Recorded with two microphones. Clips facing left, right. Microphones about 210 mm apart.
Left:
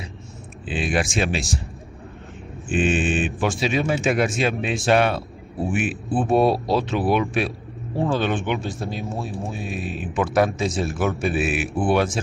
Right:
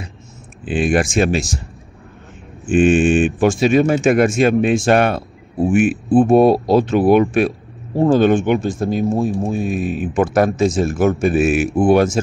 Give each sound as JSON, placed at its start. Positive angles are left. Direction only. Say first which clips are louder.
{"t": 0.7, "sound": "a man's voice", "louder": "right 7 dB", "side_deg": -50}
{"t": 2.7, "sound": "a man's voice", "louder": "right 9 dB", "side_deg": -45}